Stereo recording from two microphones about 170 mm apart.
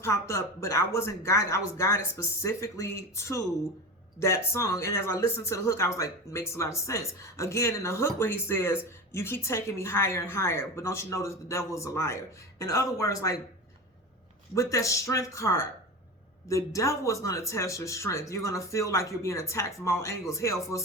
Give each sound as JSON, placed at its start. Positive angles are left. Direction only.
{"t": 0.0, "sound": "speech", "side_deg": 15}
{"t": 14.5, "sound": "speech", "side_deg": 20}